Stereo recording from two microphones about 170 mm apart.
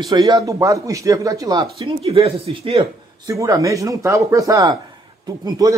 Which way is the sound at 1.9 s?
35° right (ahead or behind).